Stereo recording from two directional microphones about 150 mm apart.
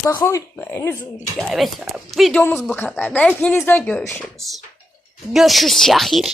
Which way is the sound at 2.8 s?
10° left (ahead or behind).